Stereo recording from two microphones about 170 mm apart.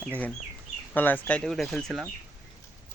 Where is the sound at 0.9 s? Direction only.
10° left (ahead or behind).